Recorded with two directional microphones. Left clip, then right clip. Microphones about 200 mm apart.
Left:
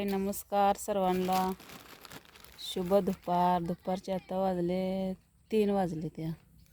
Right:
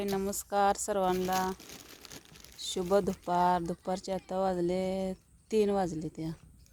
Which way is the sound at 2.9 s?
Centre (ahead or behind).